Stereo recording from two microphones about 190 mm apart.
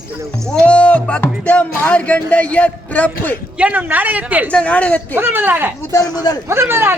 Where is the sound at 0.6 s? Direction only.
5° left (ahead or behind).